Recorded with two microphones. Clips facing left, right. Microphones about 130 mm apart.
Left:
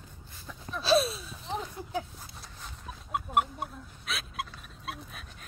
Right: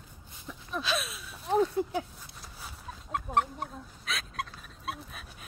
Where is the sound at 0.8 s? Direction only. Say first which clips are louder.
Left 9 dB; 35° left (ahead or behind).